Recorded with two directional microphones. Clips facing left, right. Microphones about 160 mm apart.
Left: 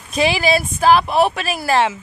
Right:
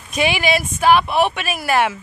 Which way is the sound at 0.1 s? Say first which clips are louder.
Left 2 dB; 35° left (ahead or behind).